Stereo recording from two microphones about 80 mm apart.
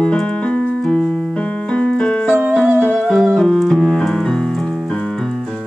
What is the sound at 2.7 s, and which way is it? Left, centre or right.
Music, centre.